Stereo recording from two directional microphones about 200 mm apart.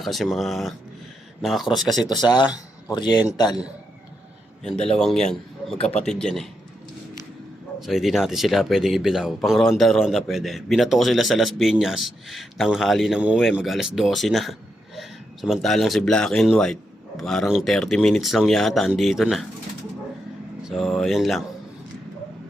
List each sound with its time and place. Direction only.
0.0 s speech: centre (ahead or behind)
2.0 s speech: 20° left (ahead or behind)
4.9 s a man's voice: 5° left (ahead or behind)
5.7 s speech: 30° left (ahead or behind)
6.1 s speech: 5° left (ahead or behind)
7.8 s speech: centre (ahead or behind)
20.7 s speech: centre (ahead or behind)